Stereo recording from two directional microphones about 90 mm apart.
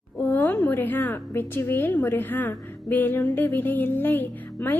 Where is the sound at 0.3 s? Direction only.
20° left (ahead or behind).